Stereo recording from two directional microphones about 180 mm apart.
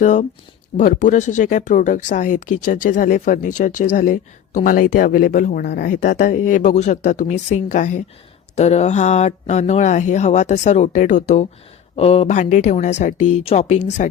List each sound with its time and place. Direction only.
0.0 s speech: 45° left (ahead or behind); by 5.9 s 65° left (ahead or behind)
5.9 s speech: 50° left (ahead or behind)